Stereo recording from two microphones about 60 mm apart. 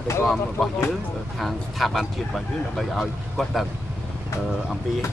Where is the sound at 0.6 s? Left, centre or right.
Centre.